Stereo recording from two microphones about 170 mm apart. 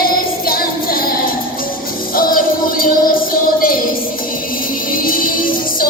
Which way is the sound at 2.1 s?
55° left (ahead or behind).